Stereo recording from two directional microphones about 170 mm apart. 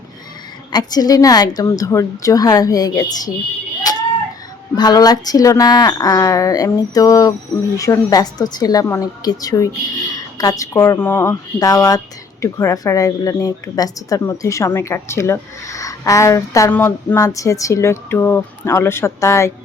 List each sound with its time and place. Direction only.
0.7 s a woman's voice: 25° left (ahead or behind)
3.9 s a sound: 20° left (ahead or behind)
4.8 s a woman's voice: 25° left (ahead or behind)